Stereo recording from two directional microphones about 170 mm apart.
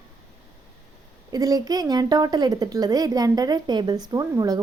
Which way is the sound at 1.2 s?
20° right (ahead or behind).